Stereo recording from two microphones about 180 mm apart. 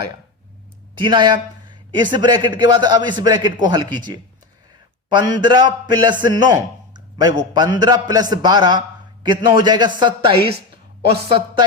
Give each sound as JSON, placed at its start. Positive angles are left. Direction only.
{"t": 0.9, "sound": "a man's voice", "side_deg": -25}